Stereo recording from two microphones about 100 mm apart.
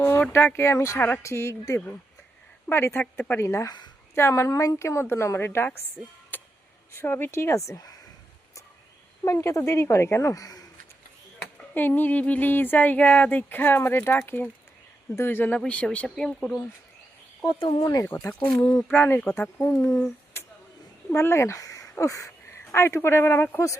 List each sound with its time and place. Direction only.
0.2 s speech: 20° left (ahead or behind)
6.3 s a sound: 20° left (ahead or behind)
6.9 s speech: 25° left (ahead or behind)
9.2 s a woman's voice: 30° left (ahead or behind)
11.7 s speech: 20° left (ahead or behind)
17.6 s speech: 65° left (ahead or behind)
18.0 s a woman's voice: 25° left (ahead or behind)
18.9 s speech: 20° left (ahead or behind)